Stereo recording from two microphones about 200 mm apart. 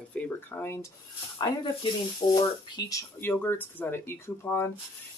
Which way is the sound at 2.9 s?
15° left (ahead or behind).